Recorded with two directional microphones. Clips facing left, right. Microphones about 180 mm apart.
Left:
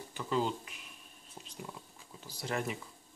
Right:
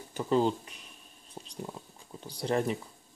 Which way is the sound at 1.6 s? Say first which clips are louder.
Right 5 dB; 30° right (ahead or behind).